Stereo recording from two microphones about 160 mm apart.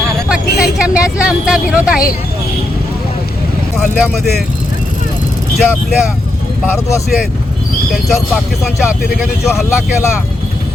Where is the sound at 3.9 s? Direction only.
80° left.